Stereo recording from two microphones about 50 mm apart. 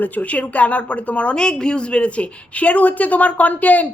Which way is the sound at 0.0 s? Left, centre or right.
Left.